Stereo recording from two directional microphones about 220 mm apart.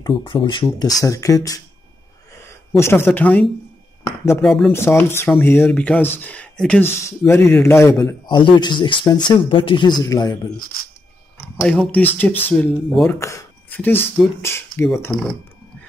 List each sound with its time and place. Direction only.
0.0 s speech: 20° left (ahead or behind)
2.8 s speech: 10° left (ahead or behind)
11.6 s speech: 5° left (ahead or behind)